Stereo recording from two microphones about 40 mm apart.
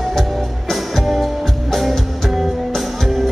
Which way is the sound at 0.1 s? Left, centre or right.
Centre.